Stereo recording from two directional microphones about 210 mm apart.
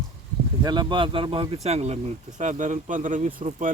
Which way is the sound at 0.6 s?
20° right (ahead or behind).